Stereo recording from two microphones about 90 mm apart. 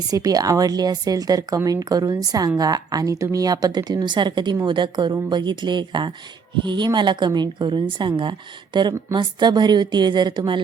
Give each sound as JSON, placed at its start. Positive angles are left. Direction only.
{"t": 0.1, "sound": "a woman's voice", "side_deg": -45}